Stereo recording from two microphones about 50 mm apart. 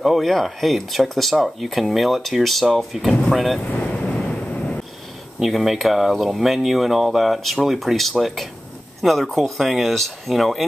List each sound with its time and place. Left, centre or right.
0.0 s speech: centre
4.1 s vehicle: centre
5.4 s speech: centre